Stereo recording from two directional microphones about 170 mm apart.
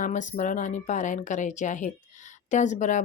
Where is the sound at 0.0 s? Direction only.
45° left (ahead or behind).